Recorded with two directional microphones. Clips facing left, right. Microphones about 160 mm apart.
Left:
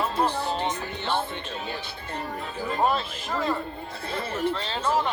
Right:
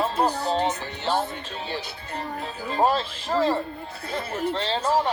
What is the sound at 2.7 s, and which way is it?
Speech, 30° right (ahead or behind).